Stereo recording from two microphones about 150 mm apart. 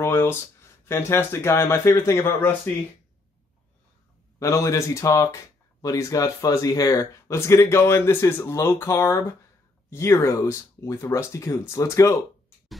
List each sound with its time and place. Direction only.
0.0 s speech: 15° left (ahead or behind)
4.4 s speech: 20° left (ahead or behind)